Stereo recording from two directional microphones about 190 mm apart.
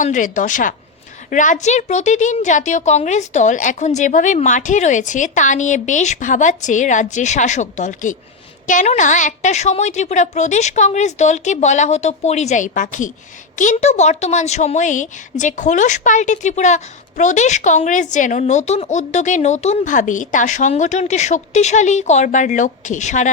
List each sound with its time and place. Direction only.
0.0 s a woman's voice: 40° left (ahead or behind)